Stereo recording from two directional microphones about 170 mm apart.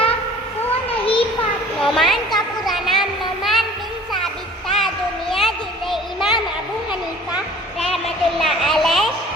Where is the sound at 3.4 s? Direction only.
Centre (ahead or behind).